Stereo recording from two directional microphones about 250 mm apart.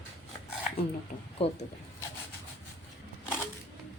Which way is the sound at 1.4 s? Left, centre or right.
Left.